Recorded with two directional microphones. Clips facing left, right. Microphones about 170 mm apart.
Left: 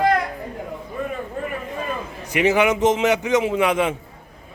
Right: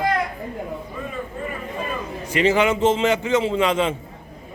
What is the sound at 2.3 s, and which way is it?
A man's voice, 15° left (ahead or behind).